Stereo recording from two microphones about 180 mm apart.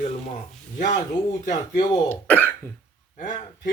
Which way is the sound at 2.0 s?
10° left (ahead or behind).